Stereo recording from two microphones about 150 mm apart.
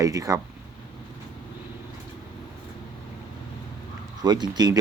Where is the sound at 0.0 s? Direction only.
25° right (ahead or behind).